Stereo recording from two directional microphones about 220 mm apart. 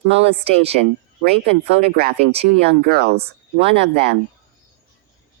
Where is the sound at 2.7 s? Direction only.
45° right (ahead or behind).